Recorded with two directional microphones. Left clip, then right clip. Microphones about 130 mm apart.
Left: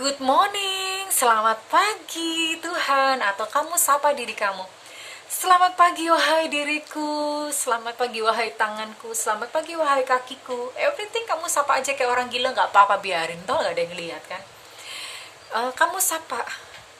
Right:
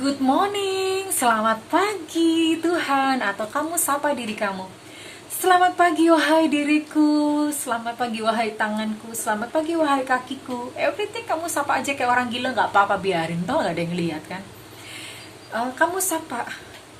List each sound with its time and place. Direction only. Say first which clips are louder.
0.0 s a woman's voice: left 1 dB; 30° left (ahead or behind); by 14.3 s 10° left (ahead or behind)
15.5 s a woman's voice: even; 40° left (ahead or behind)
16.3 s speech: left 1 dB; 20° left (ahead or behind)